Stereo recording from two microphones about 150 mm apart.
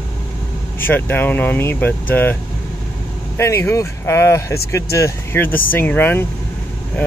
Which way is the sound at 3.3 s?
15° left (ahead or behind).